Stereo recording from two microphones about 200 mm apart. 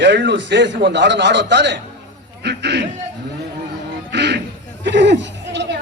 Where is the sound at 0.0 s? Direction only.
60° right (ahead or behind).